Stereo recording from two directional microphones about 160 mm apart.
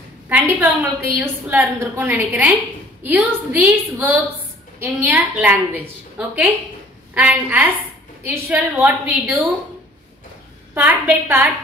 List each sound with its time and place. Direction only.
0.3 s a woman's voice: 10° right (ahead or behind)
10.7 s a woman's voice: 10° right (ahead or behind)